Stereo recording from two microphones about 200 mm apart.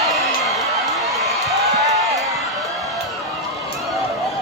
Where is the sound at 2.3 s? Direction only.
Centre (ahead or behind).